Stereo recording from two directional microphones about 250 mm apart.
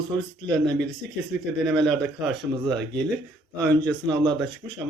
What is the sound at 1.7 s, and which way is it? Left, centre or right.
Speech, centre.